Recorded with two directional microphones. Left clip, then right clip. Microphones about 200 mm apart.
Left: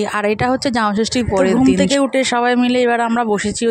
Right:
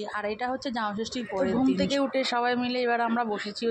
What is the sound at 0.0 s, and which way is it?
Speech, 60° left (ahead or behind).